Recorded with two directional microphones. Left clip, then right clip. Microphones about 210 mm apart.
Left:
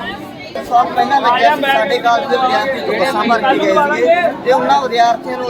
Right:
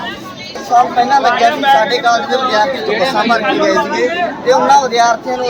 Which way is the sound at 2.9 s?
25° right (ahead or behind).